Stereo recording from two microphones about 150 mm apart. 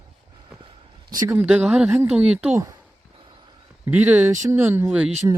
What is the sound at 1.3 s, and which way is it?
Speech, 10° right (ahead or behind).